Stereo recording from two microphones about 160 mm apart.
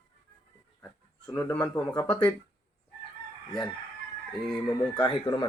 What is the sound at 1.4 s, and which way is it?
Speech, 10° left (ahead or behind).